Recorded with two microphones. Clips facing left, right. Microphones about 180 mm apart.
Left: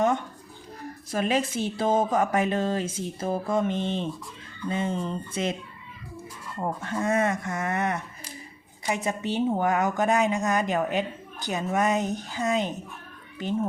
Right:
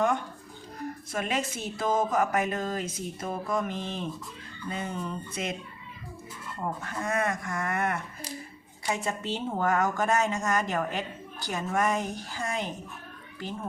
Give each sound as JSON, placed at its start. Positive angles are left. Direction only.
{"t": 1.1, "sound": "a woman's voice", "side_deg": 30}
{"t": 6.8, "sound": "a woman's voice", "side_deg": 25}